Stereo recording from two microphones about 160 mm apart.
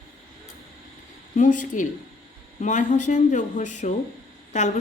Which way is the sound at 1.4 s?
55° left (ahead or behind).